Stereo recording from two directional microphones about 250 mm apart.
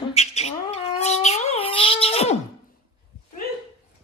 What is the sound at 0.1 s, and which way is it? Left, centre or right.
Bird, left.